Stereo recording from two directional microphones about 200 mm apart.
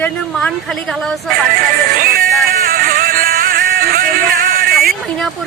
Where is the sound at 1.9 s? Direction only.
45° right (ahead or behind).